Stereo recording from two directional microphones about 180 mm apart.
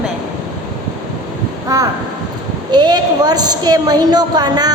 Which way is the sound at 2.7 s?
25° right (ahead or behind).